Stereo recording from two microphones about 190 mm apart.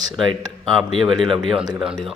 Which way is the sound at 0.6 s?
Centre (ahead or behind).